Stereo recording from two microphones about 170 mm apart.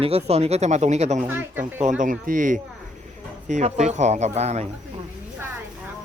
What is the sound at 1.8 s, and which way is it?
A man's voice, 45° right (ahead or behind).